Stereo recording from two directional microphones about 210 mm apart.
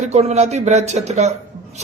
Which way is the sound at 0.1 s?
30° right (ahead or behind).